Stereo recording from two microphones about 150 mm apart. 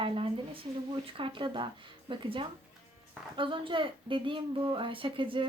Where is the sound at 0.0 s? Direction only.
35° right (ahead or behind).